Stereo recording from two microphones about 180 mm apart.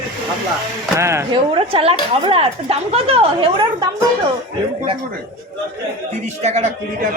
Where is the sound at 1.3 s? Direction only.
30° right (ahead or behind).